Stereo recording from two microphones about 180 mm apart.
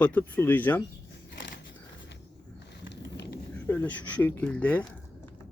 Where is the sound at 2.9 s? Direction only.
70° left (ahead or behind).